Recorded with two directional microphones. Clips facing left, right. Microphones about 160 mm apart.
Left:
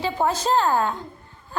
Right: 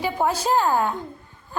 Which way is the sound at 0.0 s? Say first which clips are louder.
Even; 10° right (ahead or behind).